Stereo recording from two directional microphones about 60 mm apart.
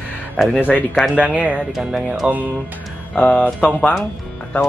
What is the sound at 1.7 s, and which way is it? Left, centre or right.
Speech, centre.